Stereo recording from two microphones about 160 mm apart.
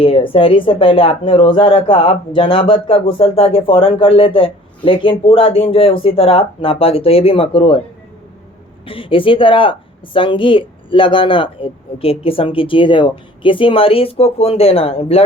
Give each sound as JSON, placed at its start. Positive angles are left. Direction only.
{"t": 0.0, "sound": "speech", "side_deg": 35}
{"t": 8.9, "sound": "speech", "side_deg": 35}